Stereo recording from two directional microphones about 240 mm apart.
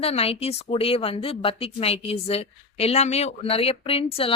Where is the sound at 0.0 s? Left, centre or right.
Left.